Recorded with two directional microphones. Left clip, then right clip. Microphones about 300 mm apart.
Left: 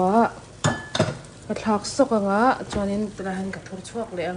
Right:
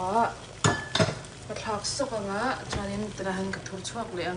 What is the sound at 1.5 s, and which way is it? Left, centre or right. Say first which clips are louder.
A woman's voice: left 6 dB; left.